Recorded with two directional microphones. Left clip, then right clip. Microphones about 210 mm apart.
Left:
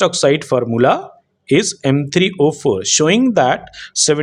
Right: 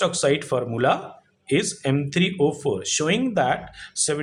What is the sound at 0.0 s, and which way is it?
Speech, 40° left (ahead or behind).